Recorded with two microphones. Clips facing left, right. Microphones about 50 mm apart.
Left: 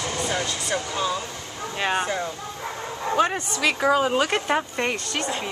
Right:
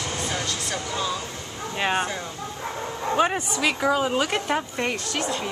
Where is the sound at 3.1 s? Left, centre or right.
Centre.